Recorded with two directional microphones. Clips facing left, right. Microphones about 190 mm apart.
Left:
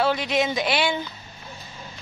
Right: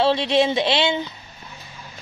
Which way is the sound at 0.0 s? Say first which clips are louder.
Right 4 dB; 30° right (ahead or behind).